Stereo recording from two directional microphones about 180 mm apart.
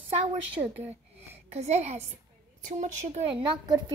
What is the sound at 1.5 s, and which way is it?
A woman's voice, 35° right (ahead or behind).